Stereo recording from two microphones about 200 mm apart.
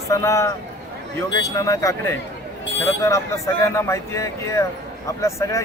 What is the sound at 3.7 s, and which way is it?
Speech, 15° left (ahead or behind).